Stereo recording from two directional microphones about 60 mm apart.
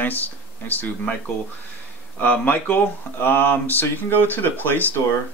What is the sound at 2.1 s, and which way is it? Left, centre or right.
Speech, left.